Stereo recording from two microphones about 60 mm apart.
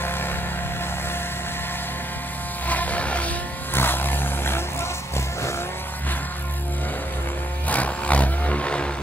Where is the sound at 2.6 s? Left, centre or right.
Left.